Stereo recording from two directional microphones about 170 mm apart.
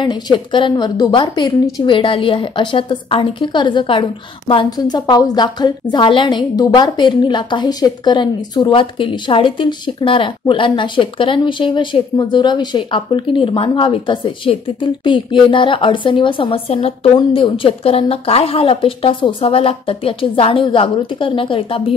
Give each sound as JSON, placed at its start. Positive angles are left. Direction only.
{"t": 0.0, "sound": "a woman's voice", "side_deg": 25}